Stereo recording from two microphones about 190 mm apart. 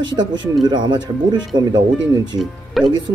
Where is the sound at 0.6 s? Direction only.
25° right (ahead or behind).